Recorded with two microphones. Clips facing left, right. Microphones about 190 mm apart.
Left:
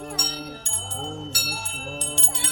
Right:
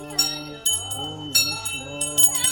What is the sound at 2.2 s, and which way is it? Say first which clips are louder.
Music: left 1 dB; 60° left (ahead or behind).